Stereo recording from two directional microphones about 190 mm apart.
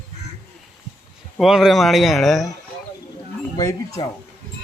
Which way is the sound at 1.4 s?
Centre (ahead or behind).